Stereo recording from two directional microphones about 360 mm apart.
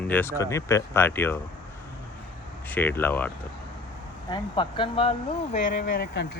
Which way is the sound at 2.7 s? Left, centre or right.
Centre.